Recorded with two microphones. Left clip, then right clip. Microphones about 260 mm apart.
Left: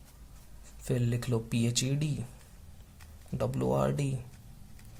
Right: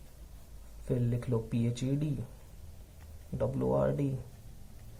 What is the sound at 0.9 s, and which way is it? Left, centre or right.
Speech, left.